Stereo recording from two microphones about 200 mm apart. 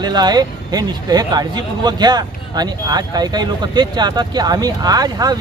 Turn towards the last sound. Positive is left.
turn(degrees=-20)  # may be behind; listen again after turning